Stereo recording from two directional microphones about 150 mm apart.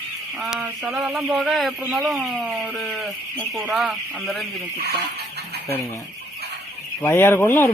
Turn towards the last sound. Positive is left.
turn(degrees=15)  # may be behind; listen again after turning